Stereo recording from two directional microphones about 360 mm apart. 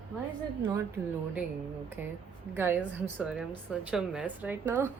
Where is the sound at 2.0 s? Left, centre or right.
Centre.